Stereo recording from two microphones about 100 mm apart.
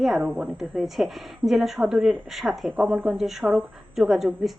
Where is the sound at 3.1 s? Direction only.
Centre (ahead or behind).